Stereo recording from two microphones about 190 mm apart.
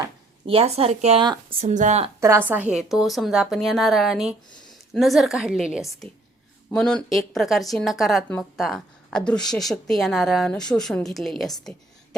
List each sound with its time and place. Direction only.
0.4 s speech: 30° right (ahead or behind)
1.6 s speech: 40° right (ahead or behind)
2.2 s speech: 10° right (ahead or behind)